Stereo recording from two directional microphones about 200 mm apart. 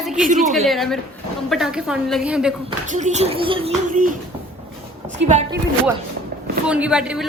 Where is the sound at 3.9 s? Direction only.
40° right (ahead or behind).